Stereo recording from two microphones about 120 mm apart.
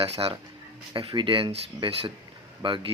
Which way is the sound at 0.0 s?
50° right (ahead or behind).